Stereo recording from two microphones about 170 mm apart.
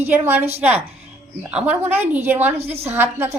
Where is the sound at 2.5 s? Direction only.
35° right (ahead or behind).